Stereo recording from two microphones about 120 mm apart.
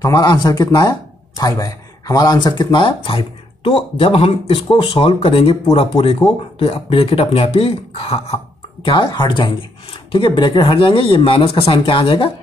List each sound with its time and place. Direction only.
0.0 s speech: 30° left (ahead or behind); by 12.3 s 50° left (ahead or behind)